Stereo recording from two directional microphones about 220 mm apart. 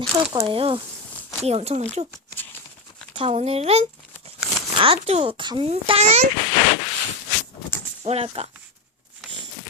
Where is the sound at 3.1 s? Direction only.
25° right (ahead or behind).